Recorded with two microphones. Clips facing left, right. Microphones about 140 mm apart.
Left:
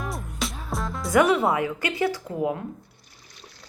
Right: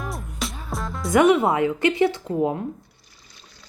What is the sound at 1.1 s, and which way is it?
Speech, 20° right (ahead or behind).